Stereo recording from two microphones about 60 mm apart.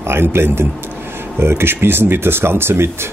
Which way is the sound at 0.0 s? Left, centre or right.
Right.